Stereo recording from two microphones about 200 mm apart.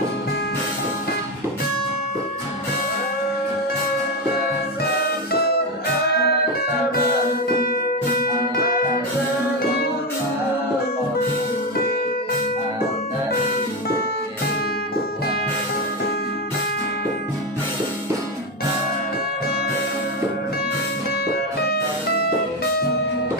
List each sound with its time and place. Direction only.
6.0 s music: 50° left (ahead or behind)
7.5 s music: 50° left (ahead or behind)